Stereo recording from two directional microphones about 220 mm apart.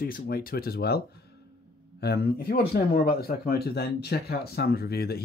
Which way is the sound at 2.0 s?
45° left (ahead or behind).